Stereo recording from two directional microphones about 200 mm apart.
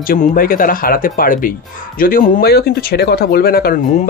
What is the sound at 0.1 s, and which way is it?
Speech, 45° left (ahead or behind).